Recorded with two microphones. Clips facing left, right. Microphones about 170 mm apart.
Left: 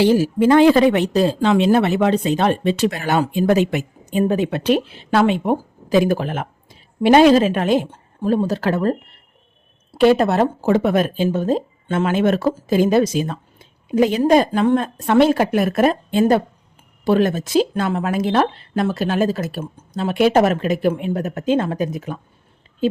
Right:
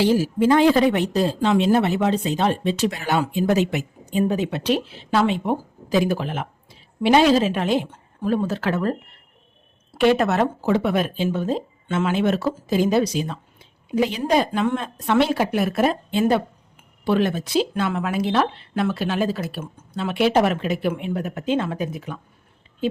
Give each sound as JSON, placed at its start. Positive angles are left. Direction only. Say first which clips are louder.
{"t": 0.0, "sound": "speech", "louder": "left 4 dB", "side_deg": 65}
{"t": 7.9, "sound": "speech", "louder": "left 3 dB", "side_deg": 30}
{"t": 10.0, "sound": "speech", "louder": "left 4 dB", "side_deg": 35}